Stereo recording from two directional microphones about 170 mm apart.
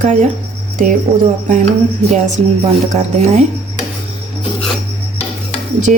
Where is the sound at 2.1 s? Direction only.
45° right (ahead or behind).